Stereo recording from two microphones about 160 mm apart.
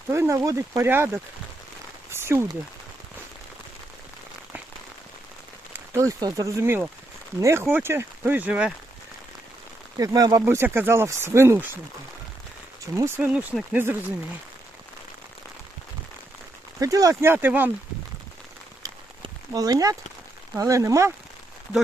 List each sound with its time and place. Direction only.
0.1 s speech: 15° right (ahead or behind)
2.0 s a sound: 15° right (ahead or behind)
5.7 s speech: 20° right (ahead or behind)
10.0 s speech: 20° right (ahead or behind)
13.0 s speech: 15° right (ahead or behind)
16.8 s speech: 20° right (ahead or behind)
18.8 s a sound: 25° right (ahead or behind)
20.6 s speech: 20° right (ahead or behind)